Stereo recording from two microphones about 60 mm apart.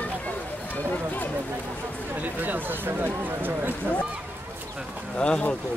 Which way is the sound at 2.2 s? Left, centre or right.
Right.